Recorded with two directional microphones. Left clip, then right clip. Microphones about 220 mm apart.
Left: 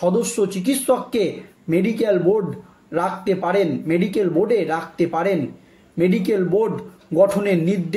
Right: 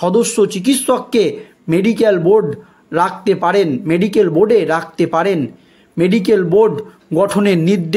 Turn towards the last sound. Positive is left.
turn(degrees=-45)  # may be behind; listen again after turning